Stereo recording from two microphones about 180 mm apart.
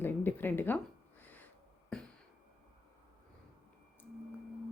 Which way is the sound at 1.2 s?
10° left (ahead or behind).